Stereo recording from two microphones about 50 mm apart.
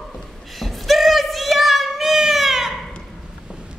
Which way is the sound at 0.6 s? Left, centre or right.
Centre.